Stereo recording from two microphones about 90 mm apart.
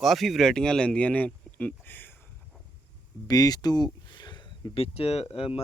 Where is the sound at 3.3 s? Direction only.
45° left (ahead or behind).